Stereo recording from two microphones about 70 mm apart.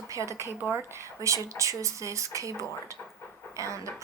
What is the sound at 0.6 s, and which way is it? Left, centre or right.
Speech, right.